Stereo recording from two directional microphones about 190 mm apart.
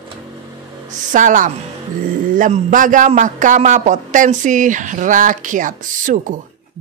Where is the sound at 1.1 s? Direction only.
45° right (ahead or behind).